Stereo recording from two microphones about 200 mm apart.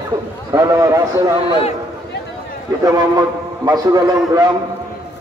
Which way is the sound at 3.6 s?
20° right (ahead or behind).